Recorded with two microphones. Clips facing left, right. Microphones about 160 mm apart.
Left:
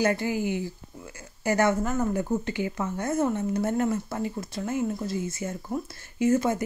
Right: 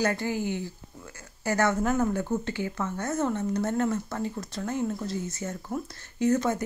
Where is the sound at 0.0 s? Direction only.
10° left (ahead or behind).